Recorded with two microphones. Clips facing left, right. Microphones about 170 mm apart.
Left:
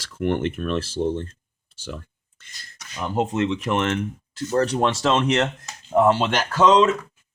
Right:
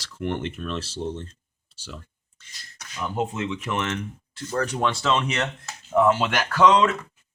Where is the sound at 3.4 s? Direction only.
35° left (ahead or behind).